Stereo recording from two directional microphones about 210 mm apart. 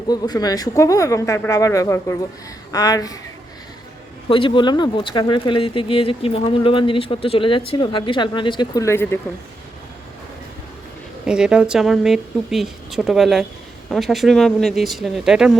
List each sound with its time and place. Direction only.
0.1 s speech: 20° left (ahead or behind)
4.3 s speech: 25° left (ahead or behind)
11.3 s speech: 5° right (ahead or behind)